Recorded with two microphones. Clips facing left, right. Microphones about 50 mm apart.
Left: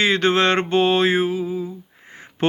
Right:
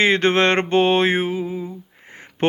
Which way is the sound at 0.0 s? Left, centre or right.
Right.